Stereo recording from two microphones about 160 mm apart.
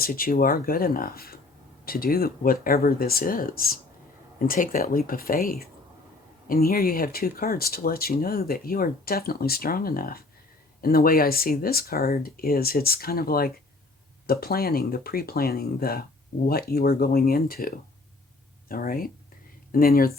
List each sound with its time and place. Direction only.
0.0 s speech: 65° left (ahead or behind)